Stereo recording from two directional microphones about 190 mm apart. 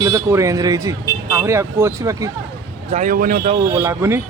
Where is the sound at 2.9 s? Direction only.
40° right (ahead or behind).